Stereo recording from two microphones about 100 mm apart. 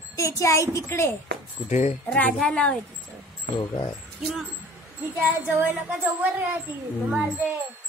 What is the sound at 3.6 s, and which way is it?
Speech, 45° left (ahead or behind).